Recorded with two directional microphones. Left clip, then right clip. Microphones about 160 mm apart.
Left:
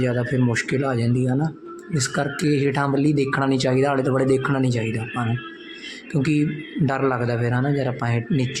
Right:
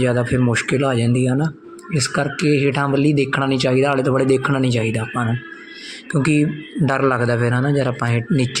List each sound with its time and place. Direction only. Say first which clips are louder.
0.0 s speech: right 4 dB; 20° right (ahead or behind)